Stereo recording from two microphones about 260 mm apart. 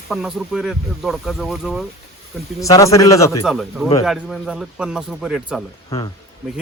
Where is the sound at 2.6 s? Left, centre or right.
Centre.